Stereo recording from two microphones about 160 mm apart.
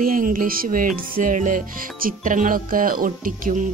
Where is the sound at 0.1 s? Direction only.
60° right (ahead or behind).